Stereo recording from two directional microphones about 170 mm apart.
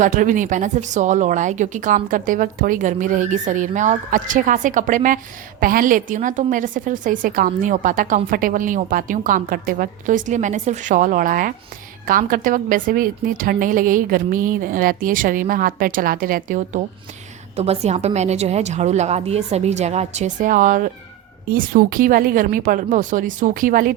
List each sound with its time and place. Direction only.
0.0 s speech: 50° right (ahead or behind)
17.6 s a woman's voice: 40° right (ahead or behind)